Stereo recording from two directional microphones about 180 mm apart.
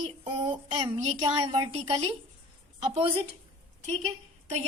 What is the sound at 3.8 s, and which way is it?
Speech, 35° right (ahead or behind).